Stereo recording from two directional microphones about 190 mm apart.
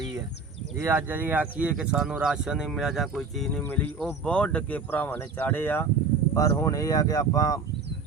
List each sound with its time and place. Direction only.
0.8 s speech: 10° right (ahead or behind); by 7.6 s 20° left (ahead or behind)